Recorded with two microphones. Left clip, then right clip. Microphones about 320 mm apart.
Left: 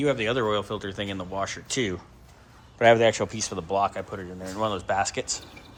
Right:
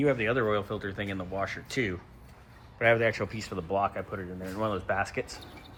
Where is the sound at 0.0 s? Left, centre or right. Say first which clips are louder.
Left 2 dB; centre.